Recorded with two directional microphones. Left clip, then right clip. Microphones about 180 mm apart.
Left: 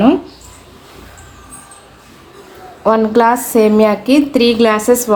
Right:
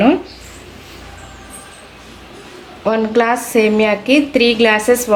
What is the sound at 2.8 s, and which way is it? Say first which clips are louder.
A woman's voice: left 4 dB; 40° left (ahead or behind).